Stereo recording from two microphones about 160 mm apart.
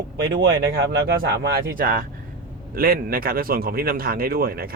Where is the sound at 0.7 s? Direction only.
80° right.